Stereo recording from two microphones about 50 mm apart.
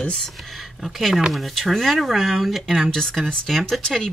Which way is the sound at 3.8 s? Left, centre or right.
Centre.